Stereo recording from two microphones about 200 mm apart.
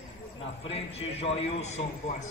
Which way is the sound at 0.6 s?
30° left (ahead or behind).